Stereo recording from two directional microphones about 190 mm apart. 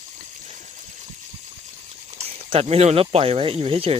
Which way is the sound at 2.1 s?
35° right (ahead or behind).